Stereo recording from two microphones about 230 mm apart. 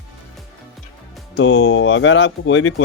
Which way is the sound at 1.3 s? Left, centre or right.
Left.